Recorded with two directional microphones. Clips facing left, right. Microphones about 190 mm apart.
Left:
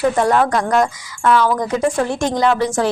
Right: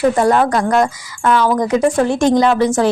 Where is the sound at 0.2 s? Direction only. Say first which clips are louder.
Right 2 dB; 10° right (ahead or behind).